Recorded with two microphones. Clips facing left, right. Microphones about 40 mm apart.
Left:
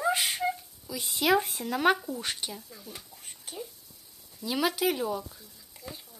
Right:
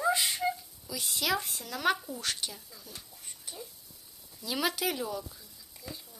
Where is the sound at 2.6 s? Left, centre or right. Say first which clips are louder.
Left 4 dB; left.